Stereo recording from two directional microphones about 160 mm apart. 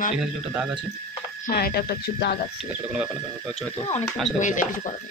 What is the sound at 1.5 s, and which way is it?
Speech, 65° left (ahead or behind).